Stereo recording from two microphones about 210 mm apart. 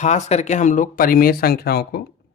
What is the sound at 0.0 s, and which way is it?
Speech, 35° left (ahead or behind).